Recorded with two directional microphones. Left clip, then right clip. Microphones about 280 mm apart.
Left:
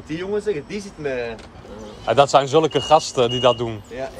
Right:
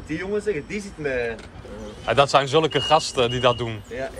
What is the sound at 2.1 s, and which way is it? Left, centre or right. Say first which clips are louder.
A man's voice: left 3 dB; centre.